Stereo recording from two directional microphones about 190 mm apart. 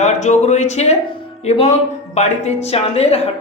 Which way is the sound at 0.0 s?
35° left (ahead or behind).